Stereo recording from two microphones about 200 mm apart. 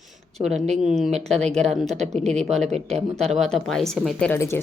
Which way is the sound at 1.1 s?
35° right (ahead or behind).